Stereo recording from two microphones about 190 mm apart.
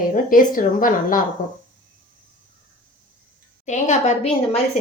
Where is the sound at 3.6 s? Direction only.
40° left (ahead or behind).